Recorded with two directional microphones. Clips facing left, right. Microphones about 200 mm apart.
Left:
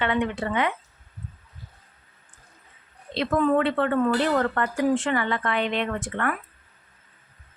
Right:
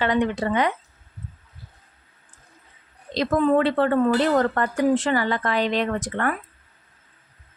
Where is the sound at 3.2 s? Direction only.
35° right (ahead or behind).